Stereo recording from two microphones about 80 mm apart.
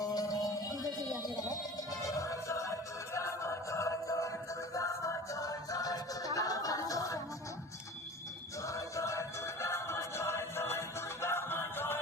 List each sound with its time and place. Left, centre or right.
0.0 s music: left
8.6 s music: left